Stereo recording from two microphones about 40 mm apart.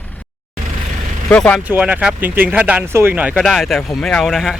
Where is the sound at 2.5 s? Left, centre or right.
Right.